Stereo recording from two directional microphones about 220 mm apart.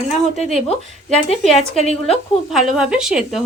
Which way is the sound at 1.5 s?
30° left (ahead or behind).